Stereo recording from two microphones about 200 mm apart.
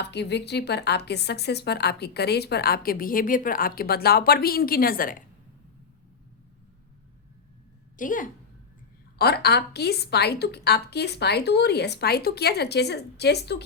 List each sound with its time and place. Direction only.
0.0 s a woman's voice: 55° left (ahead or behind)
7.9 s a woman's voice: 40° left (ahead or behind)
9.1 s a woman's voice: 55° left (ahead or behind)